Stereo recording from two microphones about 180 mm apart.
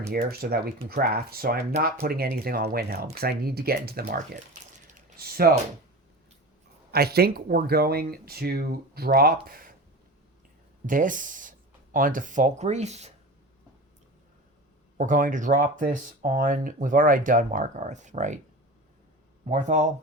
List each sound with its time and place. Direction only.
0.1 s speech: 55° right (ahead or behind)
4.9 s a sound: 55° right (ahead or behind)
6.9 s speech: 60° right (ahead or behind)
10.8 s speech: 50° right (ahead or behind)
14.9 s speech: 45° right (ahead or behind)
19.5 s speech: 40° right (ahead or behind)